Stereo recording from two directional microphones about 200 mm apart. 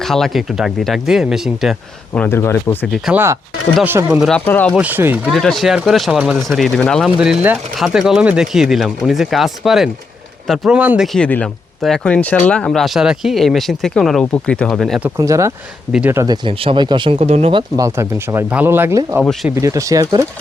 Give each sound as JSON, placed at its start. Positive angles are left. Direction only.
{"t": 0.0, "sound": "speech", "side_deg": 0}
{"t": 2.1, "sound": "speech", "side_deg": 10}
{"t": 2.8, "sound": "speech", "side_deg": 0}
{"t": 3.8, "sound": "speech", "side_deg": -10}
{"t": 4.2, "sound": "speech", "side_deg": 5}
{"t": 4.7, "sound": "speech", "side_deg": -10}
{"t": 15.2, "sound": "speech", "side_deg": -15}
{"t": 17.7, "sound": "speech", "side_deg": -15}
{"t": 19.2, "sound": "speech", "side_deg": 0}
{"t": 19.6, "sound": "speech", "side_deg": -15}